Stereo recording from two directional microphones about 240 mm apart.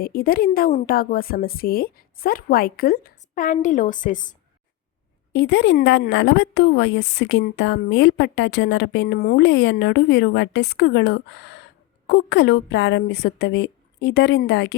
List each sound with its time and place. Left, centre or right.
0.0 s a woman's voice: left
5.3 s speech: left